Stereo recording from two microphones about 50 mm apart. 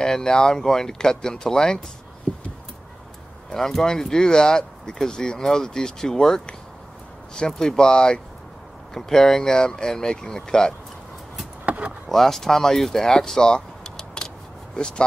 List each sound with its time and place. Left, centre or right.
0.0 s speech: centre
2.3 s a sound: left
3.5 s speech: centre
11.6 s vehicle: right
12.1 s speech: centre